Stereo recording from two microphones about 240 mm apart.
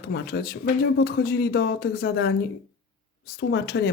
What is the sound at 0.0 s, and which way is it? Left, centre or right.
Speech, left.